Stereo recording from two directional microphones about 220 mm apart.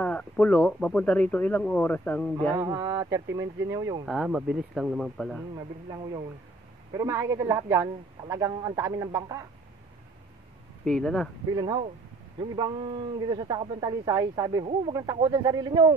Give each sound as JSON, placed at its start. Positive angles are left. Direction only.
{"t": 0.0, "sound": "speech", "side_deg": 5}
{"t": 2.5, "sound": "a man's voice", "side_deg": -15}
{"t": 4.0, "sound": "speech", "side_deg": -5}
{"t": 6.9, "sound": "a man's voice", "side_deg": -15}
{"t": 10.9, "sound": "speech", "side_deg": 0}
{"t": 11.5, "sound": "speech", "side_deg": -20}